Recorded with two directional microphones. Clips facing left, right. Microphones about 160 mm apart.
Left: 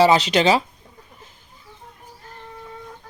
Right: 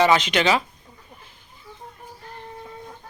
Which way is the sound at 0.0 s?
35° left (ahead or behind).